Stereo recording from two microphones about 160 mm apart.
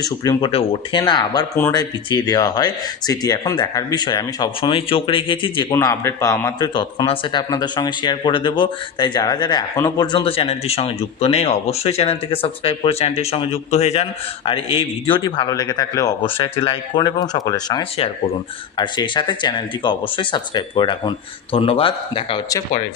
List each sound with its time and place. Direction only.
0.0 s speech: 25° left (ahead or behind)
5.7 s speech: 15° left (ahead or behind); by 22.4 s 35° left (ahead or behind)